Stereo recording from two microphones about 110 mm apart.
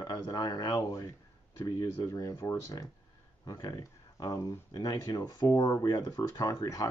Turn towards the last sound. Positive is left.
turn(degrees=30)  # may be behind; listen again after turning